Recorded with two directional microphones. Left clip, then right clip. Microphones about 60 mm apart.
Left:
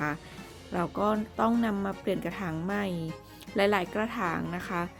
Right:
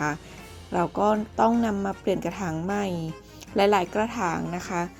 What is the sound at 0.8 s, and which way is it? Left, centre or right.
Speech, centre.